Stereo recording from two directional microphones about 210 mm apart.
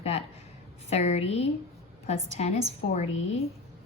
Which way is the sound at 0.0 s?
30° left (ahead or behind).